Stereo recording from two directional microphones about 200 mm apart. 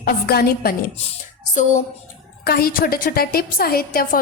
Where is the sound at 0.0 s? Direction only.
50° left (ahead or behind).